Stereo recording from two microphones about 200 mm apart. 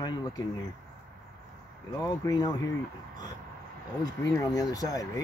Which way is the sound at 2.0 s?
20° left (ahead or behind).